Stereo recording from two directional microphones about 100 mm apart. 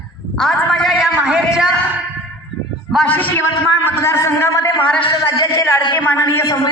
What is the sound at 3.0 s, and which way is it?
Speech, 20° left (ahead or behind).